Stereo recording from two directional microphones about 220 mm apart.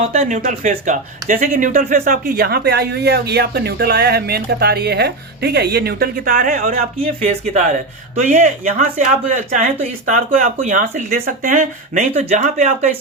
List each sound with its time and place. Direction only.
0.0 s speech: 30° right (ahead or behind)